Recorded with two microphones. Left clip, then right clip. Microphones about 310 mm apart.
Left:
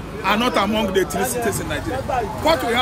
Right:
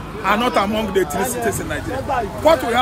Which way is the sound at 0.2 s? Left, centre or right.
Centre.